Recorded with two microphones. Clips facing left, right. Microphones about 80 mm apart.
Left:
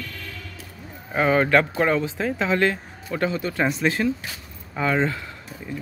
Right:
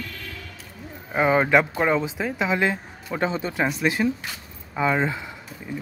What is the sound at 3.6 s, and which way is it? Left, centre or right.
Speech, centre.